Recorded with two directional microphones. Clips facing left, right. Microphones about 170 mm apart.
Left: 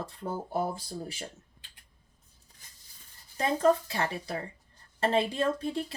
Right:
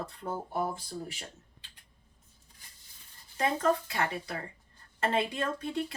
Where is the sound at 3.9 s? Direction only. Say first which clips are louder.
Left 1 dB; 30° left (ahead or behind).